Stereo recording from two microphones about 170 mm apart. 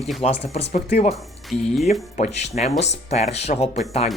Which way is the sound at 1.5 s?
Centre (ahead or behind).